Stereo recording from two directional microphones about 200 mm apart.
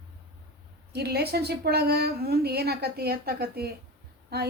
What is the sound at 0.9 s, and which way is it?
A woman's voice, 55° right (ahead or behind).